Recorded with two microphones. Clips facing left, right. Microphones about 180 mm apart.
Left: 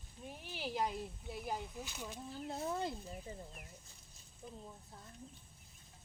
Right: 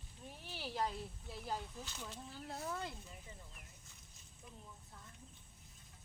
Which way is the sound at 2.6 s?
25° left (ahead or behind).